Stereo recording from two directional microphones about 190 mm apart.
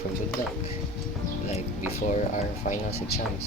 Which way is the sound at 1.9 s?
40° left (ahead or behind).